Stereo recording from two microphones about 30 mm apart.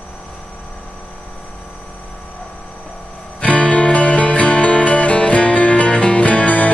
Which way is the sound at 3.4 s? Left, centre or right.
Left.